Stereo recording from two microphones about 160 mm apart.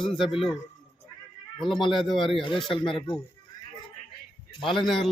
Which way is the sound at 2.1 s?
30° left (ahead or behind).